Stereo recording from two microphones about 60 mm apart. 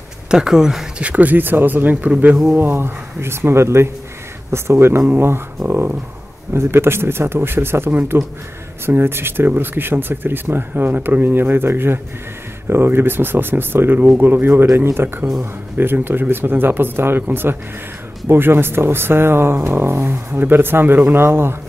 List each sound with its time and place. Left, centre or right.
0.3 s speech: centre
1.0 s speech: right
2.6 s speech: right